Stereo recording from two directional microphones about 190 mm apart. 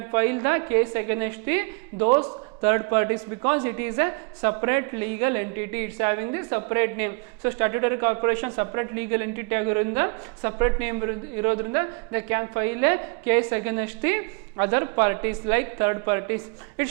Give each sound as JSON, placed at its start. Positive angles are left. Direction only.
{"t": 0.0, "sound": "a woman's voice", "side_deg": -15}